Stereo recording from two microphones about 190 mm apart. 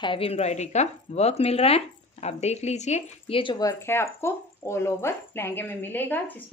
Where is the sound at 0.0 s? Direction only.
30° left (ahead or behind).